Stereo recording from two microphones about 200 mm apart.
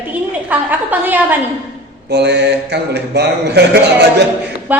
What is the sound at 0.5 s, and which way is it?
Speech, 10° right (ahead or behind).